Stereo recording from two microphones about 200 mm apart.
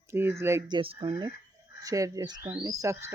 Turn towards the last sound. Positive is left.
turn(degrees=-15)  # may be behind; listen again after turning